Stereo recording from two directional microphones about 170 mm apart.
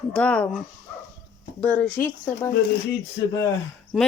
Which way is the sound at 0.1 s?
5° left (ahead or behind).